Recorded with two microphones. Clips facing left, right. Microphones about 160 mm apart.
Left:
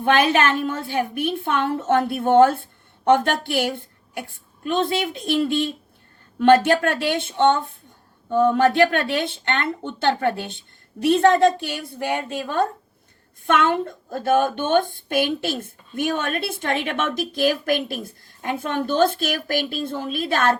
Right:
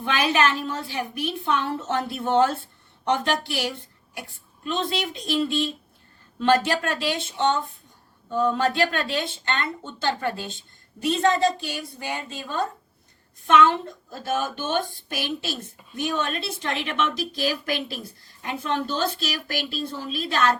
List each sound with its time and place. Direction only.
0.0 s a woman's voice: 55° left (ahead or behind)